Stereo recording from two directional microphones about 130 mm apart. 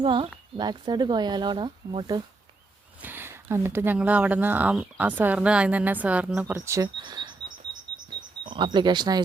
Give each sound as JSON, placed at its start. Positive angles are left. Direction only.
{"t": 0.0, "sound": "speech", "side_deg": -40}
{"t": 3.0, "sound": "speech", "side_deg": -15}
{"t": 7.0, "sound": "bird", "side_deg": -35}
{"t": 8.4, "sound": "speech", "side_deg": -40}